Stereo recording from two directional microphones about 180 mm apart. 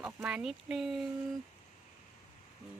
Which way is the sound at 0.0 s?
5° right (ahead or behind).